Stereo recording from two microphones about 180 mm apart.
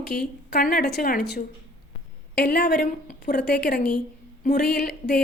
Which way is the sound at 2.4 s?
50° left (ahead or behind).